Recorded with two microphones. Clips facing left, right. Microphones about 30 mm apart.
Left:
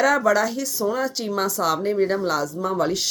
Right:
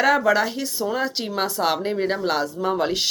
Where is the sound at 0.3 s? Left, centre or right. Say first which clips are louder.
Even; right.